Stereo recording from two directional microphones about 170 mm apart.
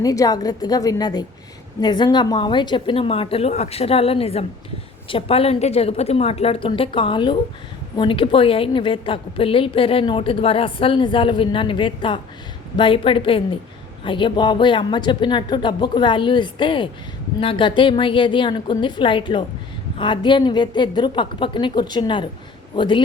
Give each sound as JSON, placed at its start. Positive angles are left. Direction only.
{"t": 0.0, "sound": "a woman's voice", "side_deg": 20}